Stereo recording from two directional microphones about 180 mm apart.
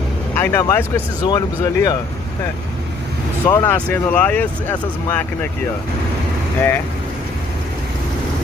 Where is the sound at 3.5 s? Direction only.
15° left (ahead or behind).